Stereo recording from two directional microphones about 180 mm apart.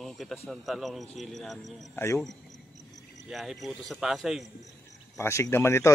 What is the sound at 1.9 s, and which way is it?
Speech, 15° left (ahead or behind).